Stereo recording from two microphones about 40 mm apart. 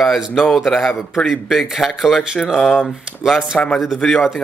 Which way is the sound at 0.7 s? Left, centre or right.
Centre.